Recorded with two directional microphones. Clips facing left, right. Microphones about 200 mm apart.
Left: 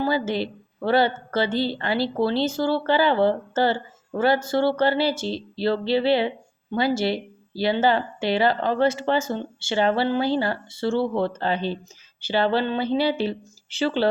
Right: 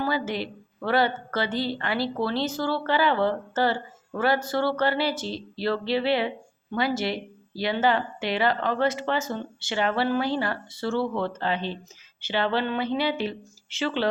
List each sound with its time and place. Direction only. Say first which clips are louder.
0.0 s a woman's voice: left 4 dB; 30° left (ahead or behind)